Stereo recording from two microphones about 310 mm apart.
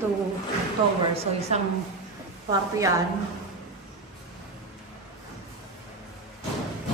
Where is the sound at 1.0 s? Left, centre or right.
Centre.